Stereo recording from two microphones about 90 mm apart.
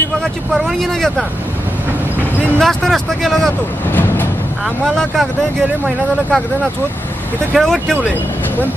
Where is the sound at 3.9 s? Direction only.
20° left (ahead or behind).